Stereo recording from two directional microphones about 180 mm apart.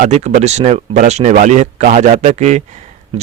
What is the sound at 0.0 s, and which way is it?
A man's voice, 40° right (ahead or behind).